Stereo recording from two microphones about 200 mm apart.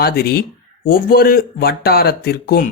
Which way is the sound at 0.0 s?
50° left (ahead or behind).